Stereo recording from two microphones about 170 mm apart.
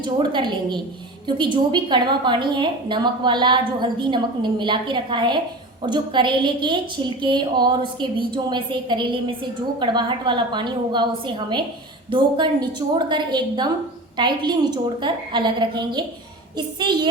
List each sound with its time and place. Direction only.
0.0 s a woman's voice: 25° right (ahead or behind)